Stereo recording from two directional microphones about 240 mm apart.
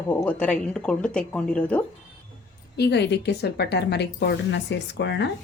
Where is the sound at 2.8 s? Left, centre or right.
Left.